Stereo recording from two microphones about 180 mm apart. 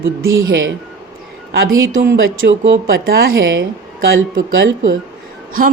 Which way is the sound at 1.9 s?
85° right.